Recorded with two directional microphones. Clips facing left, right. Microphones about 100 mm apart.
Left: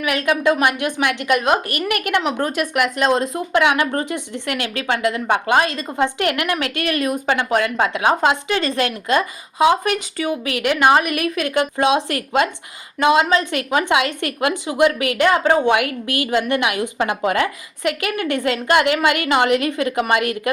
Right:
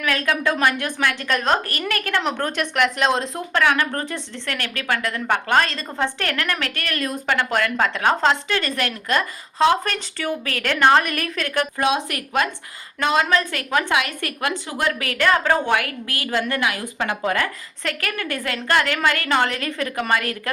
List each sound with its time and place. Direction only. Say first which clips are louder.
0.0 s a woman's voice: left 4 dB; 20° left (ahead or behind)
2.2 s speech: left 3 dB; 5° left (ahead or behind)
3.5 s a woman's voice: left 2 dB; 15° left (ahead or behind)